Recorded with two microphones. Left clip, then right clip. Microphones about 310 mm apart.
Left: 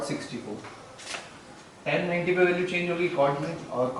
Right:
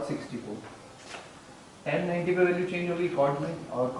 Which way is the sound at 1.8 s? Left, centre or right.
Centre.